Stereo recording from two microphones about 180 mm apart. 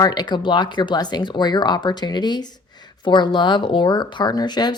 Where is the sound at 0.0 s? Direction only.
25° left (ahead or behind).